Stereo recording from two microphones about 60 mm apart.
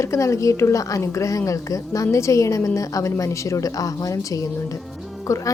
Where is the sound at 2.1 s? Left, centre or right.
Left.